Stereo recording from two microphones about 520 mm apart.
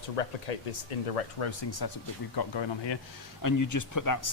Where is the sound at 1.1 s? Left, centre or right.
Left.